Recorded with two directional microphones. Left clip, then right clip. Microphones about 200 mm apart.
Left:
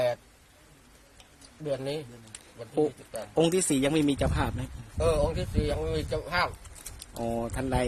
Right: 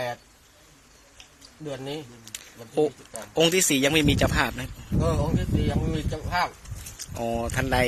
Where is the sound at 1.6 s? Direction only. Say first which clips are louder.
Left 2 dB; 20° left (ahead or behind).